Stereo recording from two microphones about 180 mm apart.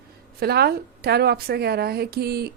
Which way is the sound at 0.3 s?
60° right (ahead or behind).